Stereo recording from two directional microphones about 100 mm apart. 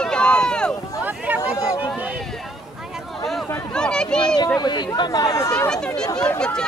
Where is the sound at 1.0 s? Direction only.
15° right (ahead or behind).